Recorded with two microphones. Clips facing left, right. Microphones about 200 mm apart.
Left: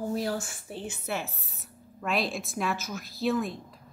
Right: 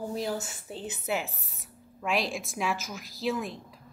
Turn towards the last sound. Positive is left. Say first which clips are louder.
# left 3 dB
turn(degrees=-15)  # may be behind; listen again after turning